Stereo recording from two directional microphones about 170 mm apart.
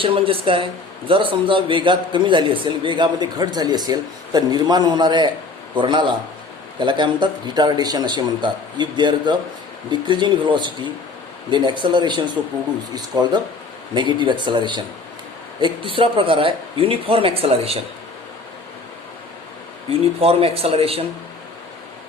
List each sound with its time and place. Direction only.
0.0 s a man's voice: 30° right (ahead or behind)
20.2 s speech: 35° right (ahead or behind)